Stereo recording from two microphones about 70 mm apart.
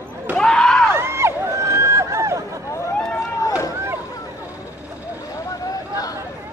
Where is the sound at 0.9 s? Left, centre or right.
Right.